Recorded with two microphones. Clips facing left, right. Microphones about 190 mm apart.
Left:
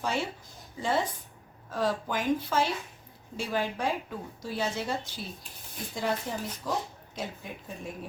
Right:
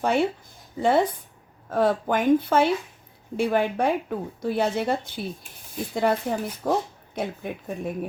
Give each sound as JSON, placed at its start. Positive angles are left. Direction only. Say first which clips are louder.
{"t": 0.0, "sound": "a woman's voice", "louder": "right 9 dB", "side_deg": -60}